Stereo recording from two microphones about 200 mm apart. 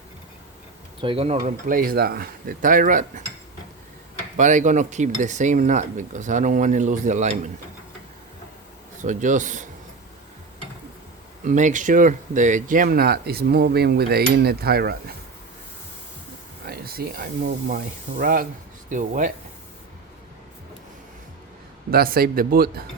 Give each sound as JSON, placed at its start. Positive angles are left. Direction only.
{"t": 1.0, "sound": "speech", "side_deg": -30}
{"t": 4.4, "sound": "speech", "side_deg": -40}
{"t": 9.0, "sound": "speech", "side_deg": -40}
{"t": 11.4, "sound": "speech", "side_deg": -40}
{"t": 16.6, "sound": "speech", "side_deg": -50}
{"t": 21.8, "sound": "speech", "side_deg": -50}